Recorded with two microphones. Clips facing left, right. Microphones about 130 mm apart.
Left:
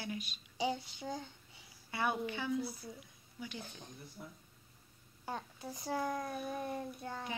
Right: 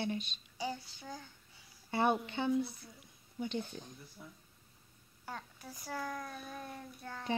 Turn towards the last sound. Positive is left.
turn(degrees=20)  # may be behind; listen again after turning